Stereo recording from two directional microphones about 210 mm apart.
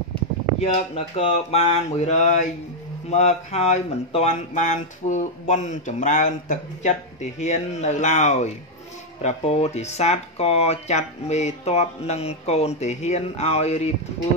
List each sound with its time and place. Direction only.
0.6 s speech: 30° left (ahead or behind)